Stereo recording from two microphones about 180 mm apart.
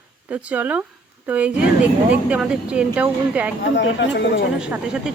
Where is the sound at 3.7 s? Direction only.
85° left.